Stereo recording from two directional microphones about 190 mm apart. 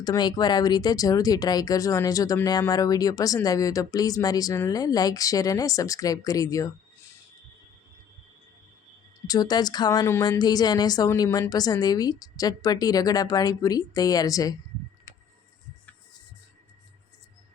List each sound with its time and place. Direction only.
0.0 s speech: 20° left (ahead or behind)
9.2 s speech: 20° left (ahead or behind)